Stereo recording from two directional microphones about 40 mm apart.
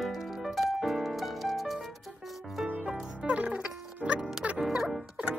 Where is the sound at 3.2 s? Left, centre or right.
Right.